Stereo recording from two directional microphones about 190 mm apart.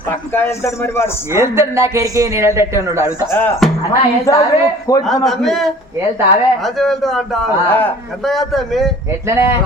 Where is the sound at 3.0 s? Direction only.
15° left (ahead or behind).